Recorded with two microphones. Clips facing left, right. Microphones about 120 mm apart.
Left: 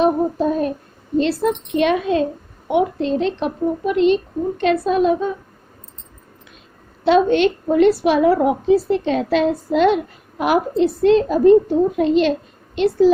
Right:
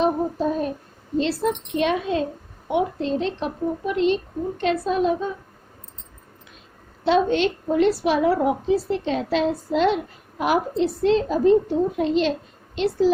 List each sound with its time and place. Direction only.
0.0 s child singing: 65° left (ahead or behind)
1.2 s a woman's voice: 60° left (ahead or behind)
7.0 s a woman's voice: 65° left (ahead or behind)